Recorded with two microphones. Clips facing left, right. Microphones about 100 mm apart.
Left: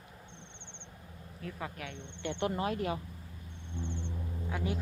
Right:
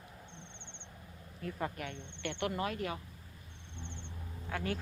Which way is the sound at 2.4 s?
30° left (ahead or behind).